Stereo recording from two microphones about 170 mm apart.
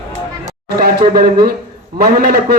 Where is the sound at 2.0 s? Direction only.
65° right (ahead or behind).